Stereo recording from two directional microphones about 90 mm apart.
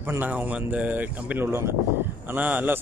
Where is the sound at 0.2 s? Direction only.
20° right (ahead or behind).